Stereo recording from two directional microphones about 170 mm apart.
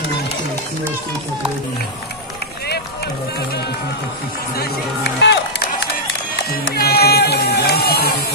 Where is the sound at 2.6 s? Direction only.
75° left (ahead or behind).